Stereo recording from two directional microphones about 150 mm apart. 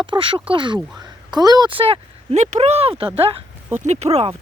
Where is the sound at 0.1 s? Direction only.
35° right (ahead or behind).